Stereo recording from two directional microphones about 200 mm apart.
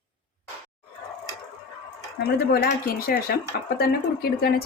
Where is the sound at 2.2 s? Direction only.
50° left (ahead or behind).